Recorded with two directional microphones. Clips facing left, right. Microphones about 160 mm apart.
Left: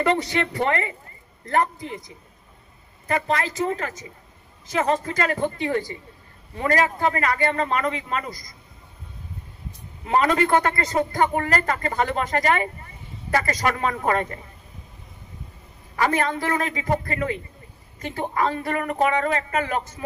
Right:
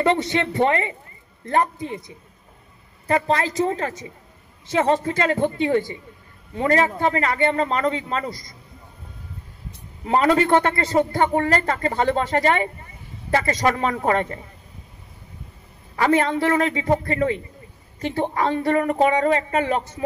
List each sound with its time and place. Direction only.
0.0 s a man's voice: 25° right (ahead or behind)
10.0 s a man's voice: 25° right (ahead or behind)
16.0 s a man's voice: 30° right (ahead or behind)